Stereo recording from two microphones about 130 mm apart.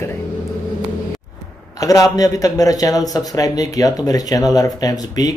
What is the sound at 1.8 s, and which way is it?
A man's voice, 30° left (ahead or behind).